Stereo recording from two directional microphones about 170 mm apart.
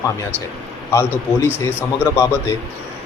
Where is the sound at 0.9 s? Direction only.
15° left (ahead or behind).